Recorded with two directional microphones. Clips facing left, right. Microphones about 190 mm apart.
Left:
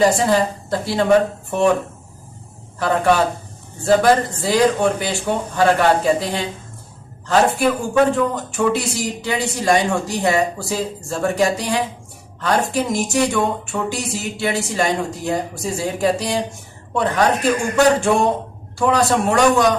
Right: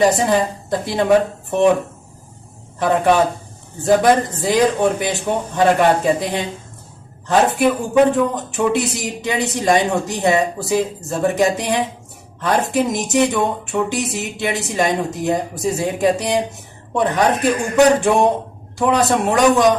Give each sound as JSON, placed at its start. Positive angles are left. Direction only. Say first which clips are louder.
{"t": 0.0, "sound": "a man's voice", "louder": "even", "side_deg": -20}
{"t": 2.7, "sound": "a man's voice", "louder": "right 2 dB", "side_deg": -20}